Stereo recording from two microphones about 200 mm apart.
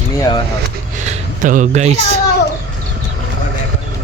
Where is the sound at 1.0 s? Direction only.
40° right (ahead or behind).